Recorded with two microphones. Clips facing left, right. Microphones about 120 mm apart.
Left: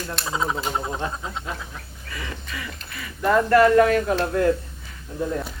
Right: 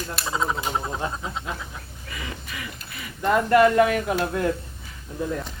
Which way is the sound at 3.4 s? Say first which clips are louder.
Left 1 dB; 20° right (ahead or behind).